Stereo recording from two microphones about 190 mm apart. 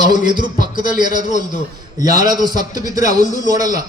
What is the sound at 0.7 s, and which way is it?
Speech, 25° right (ahead or behind).